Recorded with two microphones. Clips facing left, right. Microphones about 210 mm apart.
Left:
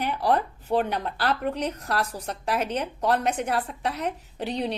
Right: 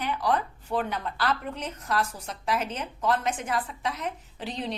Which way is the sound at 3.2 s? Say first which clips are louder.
Left 3 dB; 65° left (ahead or behind).